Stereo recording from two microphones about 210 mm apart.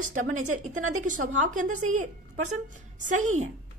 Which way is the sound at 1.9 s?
35° right (ahead or behind).